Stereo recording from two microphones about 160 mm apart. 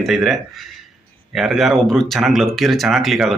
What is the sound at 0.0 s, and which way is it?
Speech, centre (ahead or behind).